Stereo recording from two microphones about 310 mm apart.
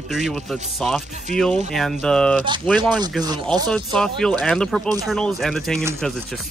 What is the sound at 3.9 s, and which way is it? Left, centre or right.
Speech, centre.